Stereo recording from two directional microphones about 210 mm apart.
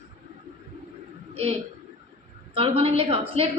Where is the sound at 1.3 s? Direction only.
30° right (ahead or behind).